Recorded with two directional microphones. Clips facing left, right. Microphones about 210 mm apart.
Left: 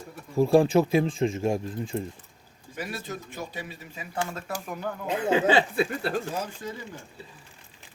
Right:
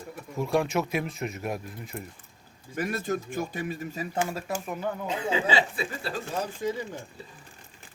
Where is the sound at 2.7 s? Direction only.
50° right (ahead or behind).